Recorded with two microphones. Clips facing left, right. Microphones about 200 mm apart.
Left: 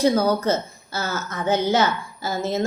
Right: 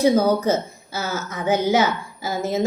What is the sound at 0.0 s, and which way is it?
A woman's voice, 15° right (ahead or behind).